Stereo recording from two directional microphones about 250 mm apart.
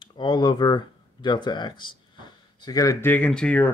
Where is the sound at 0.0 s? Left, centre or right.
Centre.